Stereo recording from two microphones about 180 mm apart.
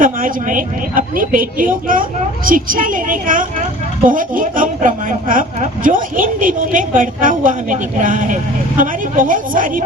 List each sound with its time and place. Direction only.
0.0 s speech: 50° right (ahead or behind)